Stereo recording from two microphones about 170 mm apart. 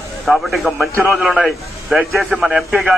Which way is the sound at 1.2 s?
Centre (ahead or behind).